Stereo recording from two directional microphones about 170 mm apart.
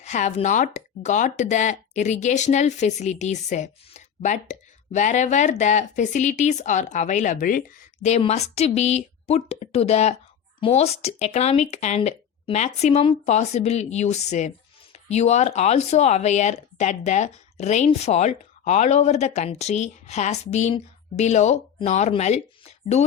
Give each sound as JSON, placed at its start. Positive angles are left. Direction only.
{"t": 0.0, "sound": "speech", "side_deg": 45}
{"t": 8.0, "sound": "speech", "side_deg": 40}